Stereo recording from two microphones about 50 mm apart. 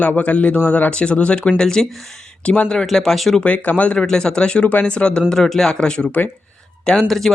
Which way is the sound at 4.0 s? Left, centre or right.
Centre.